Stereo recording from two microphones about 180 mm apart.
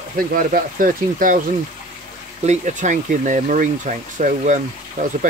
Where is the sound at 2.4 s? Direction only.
40° right (ahead or behind).